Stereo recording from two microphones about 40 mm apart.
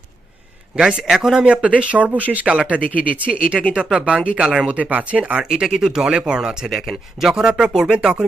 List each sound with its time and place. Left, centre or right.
0.8 s speech: right
4.7 s speech: right
5.4 s speech: centre